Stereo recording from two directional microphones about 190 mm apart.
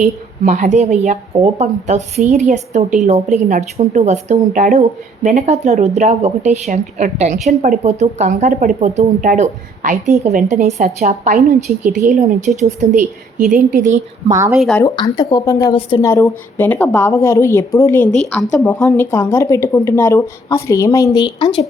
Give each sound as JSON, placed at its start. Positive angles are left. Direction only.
{"t": 0.0, "sound": "a woman's voice", "side_deg": -40}
{"t": 14.3, "sound": "speech", "side_deg": -15}
{"t": 14.5, "sound": "speech", "side_deg": 0}
{"t": 14.8, "sound": "speech", "side_deg": 20}
{"t": 21.4, "sound": "speech", "side_deg": 35}